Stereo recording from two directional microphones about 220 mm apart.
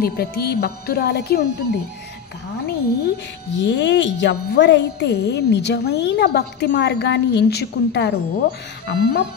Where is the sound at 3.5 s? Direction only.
55° left (ahead or behind).